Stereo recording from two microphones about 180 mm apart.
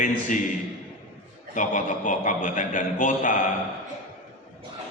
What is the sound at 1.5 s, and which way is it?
A man's voice, 45° left (ahead or behind).